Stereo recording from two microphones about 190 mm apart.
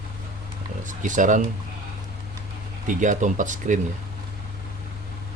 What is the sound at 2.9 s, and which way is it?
Speech, 40° right (ahead or behind).